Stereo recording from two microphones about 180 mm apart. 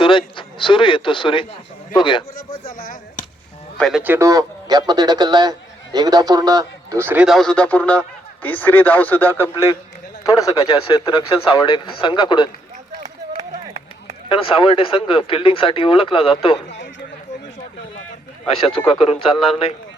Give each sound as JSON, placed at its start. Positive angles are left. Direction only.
{"t": 0.0, "sound": "speech", "side_deg": 30}
{"t": 2.3, "sound": "speech", "side_deg": 50}
{"t": 3.8, "sound": "speech", "side_deg": 0}
{"t": 4.0, "sound": "a man's voice", "side_deg": -15}
{"t": 10.6, "sound": "speech", "side_deg": 30}
{"t": 14.3, "sound": "speech", "side_deg": 30}
{"t": 18.9, "sound": "speech", "side_deg": 35}